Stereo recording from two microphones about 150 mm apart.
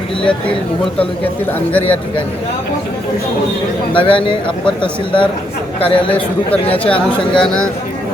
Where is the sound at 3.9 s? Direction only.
35° left (ahead or behind).